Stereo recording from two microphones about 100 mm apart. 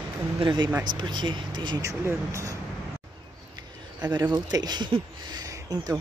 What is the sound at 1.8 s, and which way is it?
Speech, 30° right (ahead or behind).